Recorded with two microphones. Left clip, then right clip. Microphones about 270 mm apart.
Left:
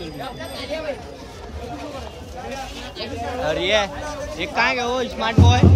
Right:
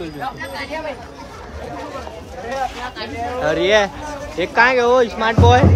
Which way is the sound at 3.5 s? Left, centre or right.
Right.